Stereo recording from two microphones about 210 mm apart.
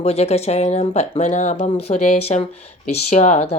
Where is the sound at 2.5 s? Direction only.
90° left.